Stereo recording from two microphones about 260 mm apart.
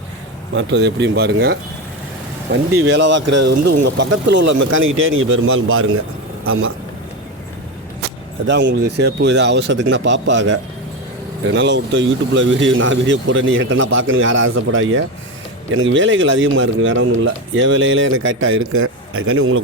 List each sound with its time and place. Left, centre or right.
0.5 s speech: right
8.4 s speech: right